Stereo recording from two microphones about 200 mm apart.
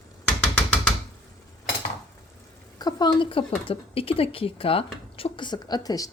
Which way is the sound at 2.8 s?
20° left (ahead or behind).